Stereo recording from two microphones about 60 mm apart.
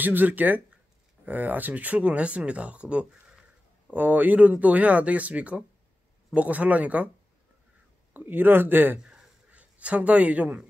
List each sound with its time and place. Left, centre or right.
0.0 s speech: right
3.9 s speech: right
8.1 s speech: right
9.1 s a sound: right